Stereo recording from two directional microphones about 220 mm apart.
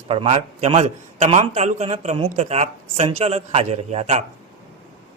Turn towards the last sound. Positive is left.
turn(degrees=-30)  # may be behind; listen again after turning